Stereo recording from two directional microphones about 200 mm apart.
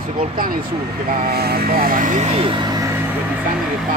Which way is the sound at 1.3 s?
50° right (ahead or behind).